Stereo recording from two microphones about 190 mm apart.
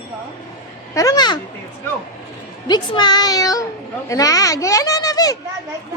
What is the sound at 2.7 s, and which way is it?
Speech, 25° left (ahead or behind).